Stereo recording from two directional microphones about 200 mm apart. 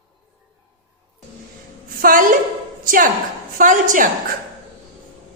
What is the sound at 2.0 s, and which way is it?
Speech, 40° right (ahead or behind).